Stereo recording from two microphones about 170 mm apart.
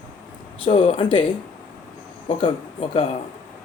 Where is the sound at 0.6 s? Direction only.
35° left (ahead or behind).